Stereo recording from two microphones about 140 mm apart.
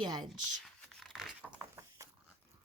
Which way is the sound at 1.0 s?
Centre (ahead or behind).